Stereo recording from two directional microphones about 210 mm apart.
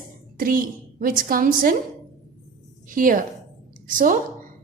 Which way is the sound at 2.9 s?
40° right (ahead or behind).